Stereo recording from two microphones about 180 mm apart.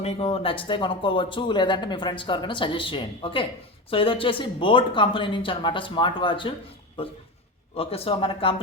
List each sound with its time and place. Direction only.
0.0 s speech: 35° left (ahead or behind)
7.8 s speech: 30° left (ahead or behind)